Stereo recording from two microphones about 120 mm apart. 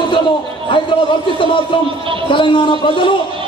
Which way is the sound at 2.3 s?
45° left (ahead or behind).